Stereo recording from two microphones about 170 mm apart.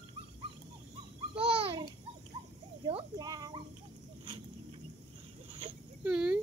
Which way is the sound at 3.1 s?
20° right (ahead or behind).